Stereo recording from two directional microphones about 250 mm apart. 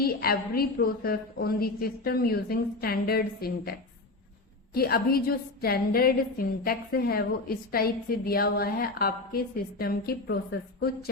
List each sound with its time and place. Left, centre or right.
0.0 s a woman's voice: left